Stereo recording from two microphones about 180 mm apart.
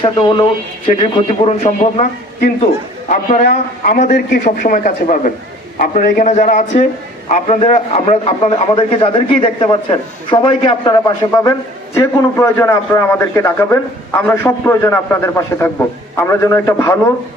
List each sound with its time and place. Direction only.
0.0 s a man's voice: 25° left (ahead or behind)
3.1 s a man's voice: 40° left (ahead or behind); by 17.0 s 20° left (ahead or behind)